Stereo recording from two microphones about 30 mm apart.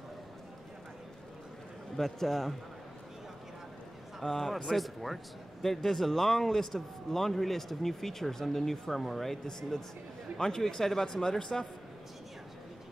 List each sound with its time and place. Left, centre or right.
2.0 s speech: centre
4.2 s speech: centre
4.6 s speech: centre
9.5 s speech: centre